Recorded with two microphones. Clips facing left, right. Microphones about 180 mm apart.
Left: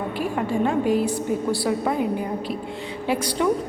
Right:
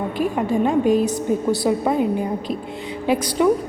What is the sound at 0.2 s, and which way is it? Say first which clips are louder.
A woman's voice: right 4 dB; 15° right (ahead or behind).